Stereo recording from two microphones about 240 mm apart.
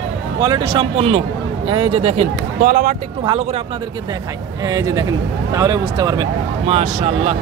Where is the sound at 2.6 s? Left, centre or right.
Right.